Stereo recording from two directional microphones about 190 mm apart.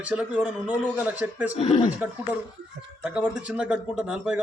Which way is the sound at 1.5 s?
30° left (ahead or behind).